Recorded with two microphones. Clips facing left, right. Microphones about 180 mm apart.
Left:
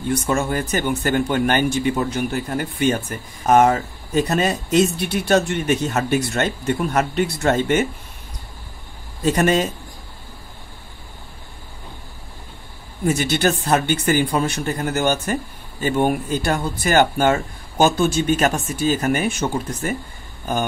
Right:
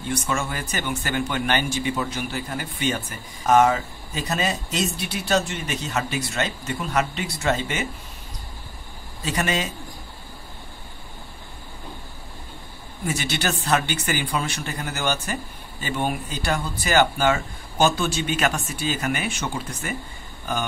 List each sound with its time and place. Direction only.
0.4 s a man's voice: 45° left (ahead or behind)
9.2 s a man's voice: 45° left (ahead or behind)
13.0 s a man's voice: 50° left (ahead or behind)